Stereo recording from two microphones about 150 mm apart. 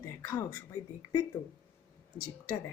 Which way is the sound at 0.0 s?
20° left (ahead or behind).